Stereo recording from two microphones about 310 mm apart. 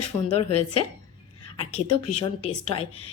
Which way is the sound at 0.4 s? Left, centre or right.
Left.